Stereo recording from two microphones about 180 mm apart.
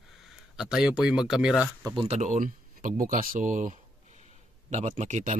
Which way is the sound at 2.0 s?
40° right (ahead or behind).